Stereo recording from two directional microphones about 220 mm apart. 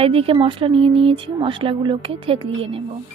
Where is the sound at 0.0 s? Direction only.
25° right (ahead or behind).